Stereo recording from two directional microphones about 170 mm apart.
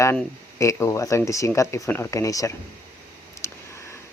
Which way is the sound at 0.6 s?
20° left (ahead or behind).